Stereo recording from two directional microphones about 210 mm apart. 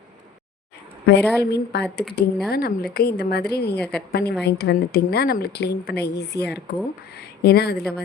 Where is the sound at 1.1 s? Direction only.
50° left (ahead or behind).